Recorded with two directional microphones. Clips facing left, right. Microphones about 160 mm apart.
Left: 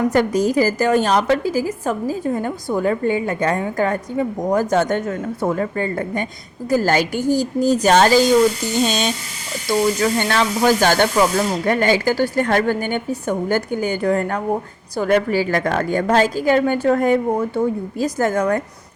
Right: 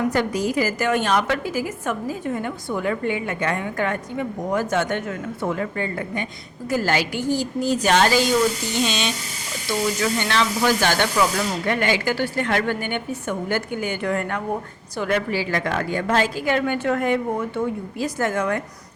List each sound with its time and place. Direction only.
0.1 s a woman's voice: 45° left (ahead or behind)